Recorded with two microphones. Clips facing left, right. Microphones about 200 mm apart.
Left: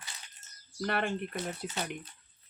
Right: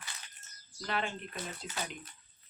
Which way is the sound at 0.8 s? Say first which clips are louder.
Left 4 dB; 60° left (ahead or behind).